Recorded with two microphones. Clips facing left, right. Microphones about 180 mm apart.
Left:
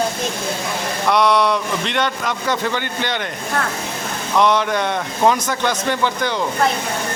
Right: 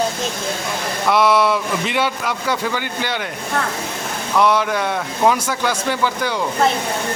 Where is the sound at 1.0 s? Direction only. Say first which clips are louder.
Right 1 dB; 5° right (ahead or behind).